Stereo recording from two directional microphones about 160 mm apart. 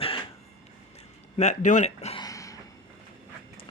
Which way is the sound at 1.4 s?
50° left (ahead or behind).